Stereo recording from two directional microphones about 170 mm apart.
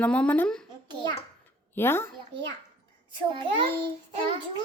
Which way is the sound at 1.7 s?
15° left (ahead or behind).